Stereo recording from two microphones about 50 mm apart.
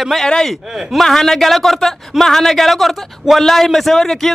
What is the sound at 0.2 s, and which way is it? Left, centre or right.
Speech, centre.